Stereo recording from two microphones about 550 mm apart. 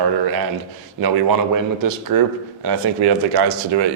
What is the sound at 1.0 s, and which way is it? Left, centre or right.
Speech, right.